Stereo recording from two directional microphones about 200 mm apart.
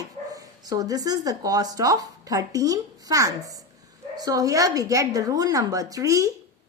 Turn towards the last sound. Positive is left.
turn(degrees=-15)  # may be behind; listen again after turning